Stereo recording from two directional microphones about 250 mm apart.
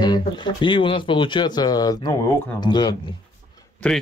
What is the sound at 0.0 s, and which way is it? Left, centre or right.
Speech, centre.